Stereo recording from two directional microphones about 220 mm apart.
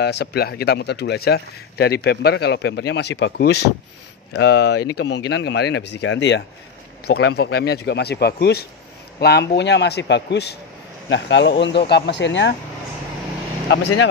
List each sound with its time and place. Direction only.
0.0 s speech: 50° left (ahead or behind)
13.7 s speech: 55° left (ahead or behind)